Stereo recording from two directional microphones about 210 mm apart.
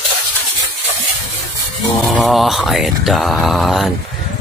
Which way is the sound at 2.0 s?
Centre (ahead or behind).